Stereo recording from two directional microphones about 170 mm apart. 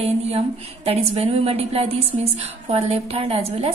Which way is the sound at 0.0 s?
35° right (ahead or behind).